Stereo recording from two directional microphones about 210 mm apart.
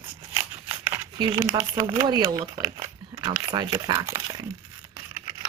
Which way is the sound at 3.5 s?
20° right (ahead or behind).